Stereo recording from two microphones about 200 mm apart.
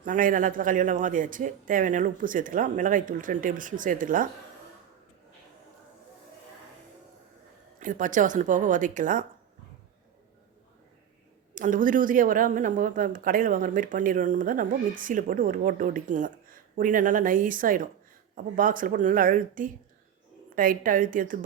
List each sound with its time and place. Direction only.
0.0 s a man's voice: 40° right (ahead or behind)
7.8 s a man's voice: 40° right (ahead or behind)
11.5 s a woman's voice: 40° right (ahead or behind)